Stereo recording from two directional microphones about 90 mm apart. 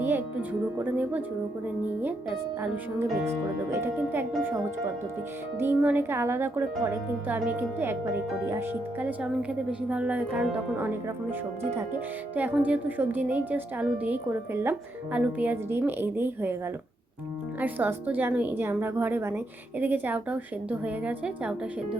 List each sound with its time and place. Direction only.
0.0 s music: 25° right (ahead or behind)
0.8 s a woman's voice: 15° right (ahead or behind)
2.6 s speech: 25° right (ahead or behind)
5.5 s a woman's voice: 20° right (ahead or behind)
17.6 s a woman's voice: 20° right (ahead or behind)